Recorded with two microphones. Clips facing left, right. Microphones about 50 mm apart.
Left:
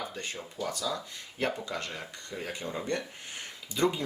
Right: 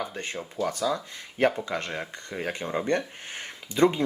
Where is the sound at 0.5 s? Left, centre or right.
Right.